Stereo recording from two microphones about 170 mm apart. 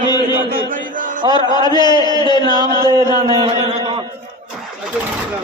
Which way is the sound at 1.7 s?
25° left (ahead or behind).